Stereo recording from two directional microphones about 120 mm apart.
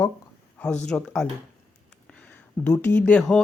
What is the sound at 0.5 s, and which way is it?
Speech, 10° left (ahead or behind).